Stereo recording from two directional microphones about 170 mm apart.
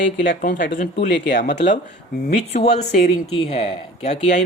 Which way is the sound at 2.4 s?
40° left (ahead or behind).